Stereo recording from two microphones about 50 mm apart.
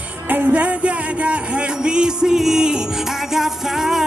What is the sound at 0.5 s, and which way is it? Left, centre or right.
Music, right.